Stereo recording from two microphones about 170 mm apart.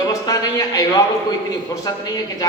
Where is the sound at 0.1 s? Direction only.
25° left (ahead or behind).